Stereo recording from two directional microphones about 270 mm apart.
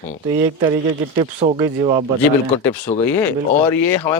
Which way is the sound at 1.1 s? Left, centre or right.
Centre.